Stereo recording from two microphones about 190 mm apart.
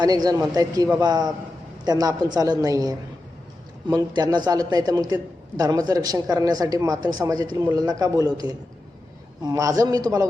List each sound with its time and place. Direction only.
0.0 s a man's voice: 20° right (ahead or behind)